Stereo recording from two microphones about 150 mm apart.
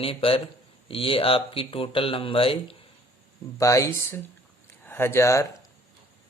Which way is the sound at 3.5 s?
20° left (ahead or behind).